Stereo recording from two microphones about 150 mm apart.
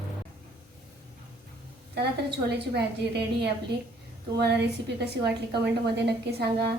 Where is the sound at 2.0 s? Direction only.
90° right.